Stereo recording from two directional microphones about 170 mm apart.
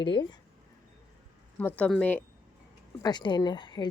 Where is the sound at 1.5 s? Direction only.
10° left (ahead or behind).